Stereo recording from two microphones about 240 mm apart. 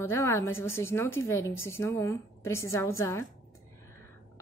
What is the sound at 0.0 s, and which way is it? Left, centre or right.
A woman's voice, centre.